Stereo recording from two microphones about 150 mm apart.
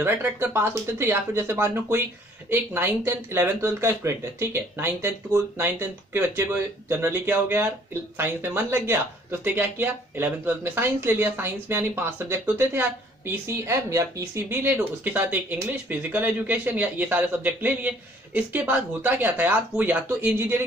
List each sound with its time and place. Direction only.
0.0 s speech: 15° right (ahead or behind)